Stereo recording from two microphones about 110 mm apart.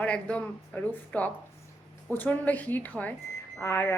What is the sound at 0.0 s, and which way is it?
A woman's voice, 10° left (ahead or behind).